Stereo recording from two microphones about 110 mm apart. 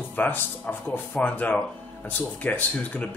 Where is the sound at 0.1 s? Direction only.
15° left (ahead or behind).